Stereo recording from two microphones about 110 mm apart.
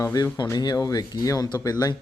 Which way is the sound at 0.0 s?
35° left (ahead or behind).